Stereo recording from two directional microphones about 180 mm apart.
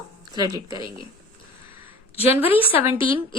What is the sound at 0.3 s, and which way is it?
Speech, 20° right (ahead or behind).